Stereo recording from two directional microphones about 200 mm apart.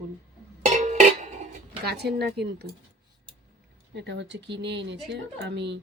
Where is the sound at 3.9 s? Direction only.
60° right (ahead or behind).